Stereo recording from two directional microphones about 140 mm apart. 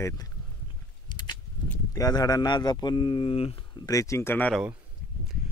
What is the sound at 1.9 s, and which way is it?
Speech, 25° left (ahead or behind).